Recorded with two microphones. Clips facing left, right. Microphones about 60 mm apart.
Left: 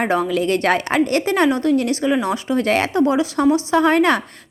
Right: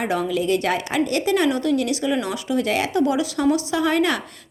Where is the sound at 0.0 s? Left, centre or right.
Left.